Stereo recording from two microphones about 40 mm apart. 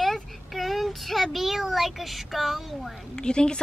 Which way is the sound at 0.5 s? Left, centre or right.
Centre.